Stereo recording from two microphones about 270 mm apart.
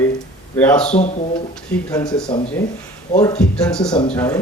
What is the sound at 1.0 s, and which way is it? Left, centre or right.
Speech, left.